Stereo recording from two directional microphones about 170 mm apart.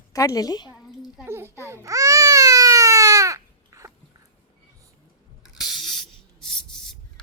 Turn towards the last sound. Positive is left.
turn(degrees=5)  # may be behind; listen again after turning